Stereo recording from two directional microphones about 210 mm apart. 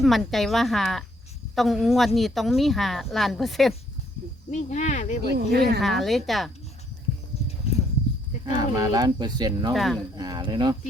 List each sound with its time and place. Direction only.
0.0 s speech: centre (ahead or behind)
4.5 s speech: 35° left (ahead or behind)
5.3 s speech: 50° right (ahead or behind)
5.8 s speech: centre (ahead or behind)
8.5 s speech: 20° right (ahead or behind)
9.7 s speech: centre (ahead or behind)
10.2 s speech: 20° right (ahead or behind)